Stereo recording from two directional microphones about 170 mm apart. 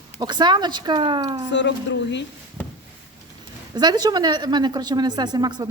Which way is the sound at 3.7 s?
25° right (ahead or behind).